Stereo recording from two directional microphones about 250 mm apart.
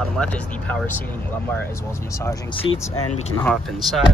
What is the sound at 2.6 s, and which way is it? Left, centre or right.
Speech, centre.